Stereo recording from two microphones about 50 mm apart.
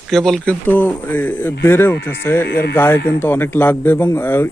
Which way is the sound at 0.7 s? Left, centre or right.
Left.